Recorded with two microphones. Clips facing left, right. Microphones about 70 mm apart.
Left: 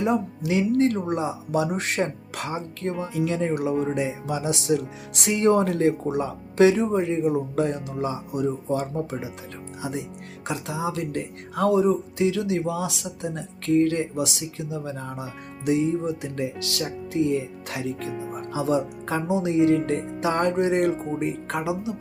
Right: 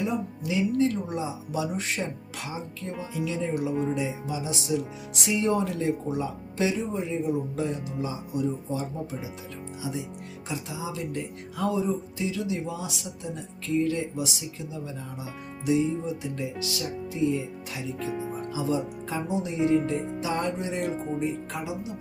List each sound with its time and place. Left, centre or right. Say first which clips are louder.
0.0 s speech: left 5 dB; left
5.3 s speech: left 6 dB; left
10.5 s speech: left 6 dB; left
15.6 s speech: left 3 dB; left
18.1 s music: even; centre
18.5 s speech: left 5 dB; left
20.1 s speech: left 6 dB; left